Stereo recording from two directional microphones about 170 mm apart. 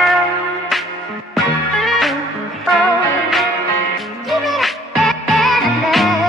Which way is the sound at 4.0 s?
Centre (ahead or behind).